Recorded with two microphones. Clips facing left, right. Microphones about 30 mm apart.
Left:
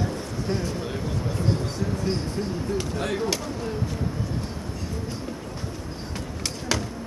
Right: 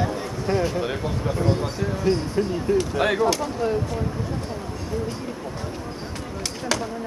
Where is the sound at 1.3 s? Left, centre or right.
Centre.